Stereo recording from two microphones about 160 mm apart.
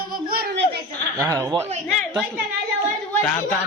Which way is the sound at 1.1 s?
20° right (ahead or behind).